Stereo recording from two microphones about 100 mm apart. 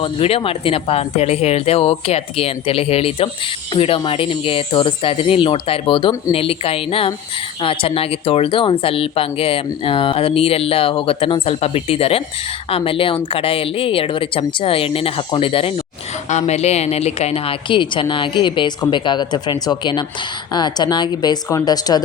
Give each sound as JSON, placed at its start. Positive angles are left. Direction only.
{"t": 0.0, "sound": "a woman's voice", "side_deg": 75}
{"t": 6.3, "sound": "speech", "side_deg": 70}
{"t": 12.7, "sound": "speech", "side_deg": 65}
{"t": 16.5, "sound": "a woman's voice", "side_deg": 90}